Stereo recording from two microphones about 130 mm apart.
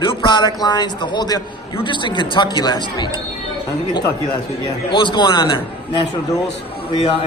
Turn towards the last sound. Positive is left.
turn(degrees=45)  # may be behind; listen again after turning